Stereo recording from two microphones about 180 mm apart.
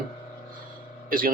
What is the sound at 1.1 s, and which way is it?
Speech, 50° right (ahead or behind).